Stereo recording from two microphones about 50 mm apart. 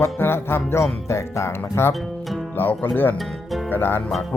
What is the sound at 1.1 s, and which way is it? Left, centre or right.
Music, left.